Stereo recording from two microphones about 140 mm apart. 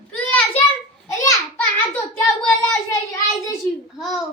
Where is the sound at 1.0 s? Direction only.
25° left (ahead or behind).